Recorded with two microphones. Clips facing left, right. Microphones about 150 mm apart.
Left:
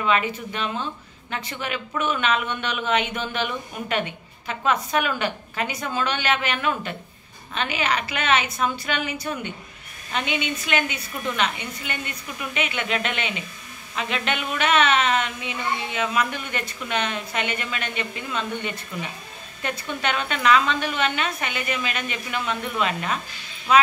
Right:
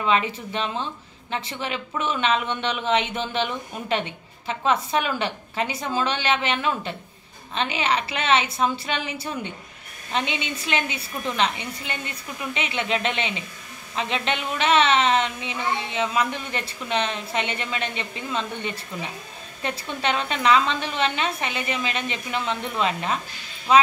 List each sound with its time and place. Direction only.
0.0 s a woman's voice: 30° right (ahead or behind)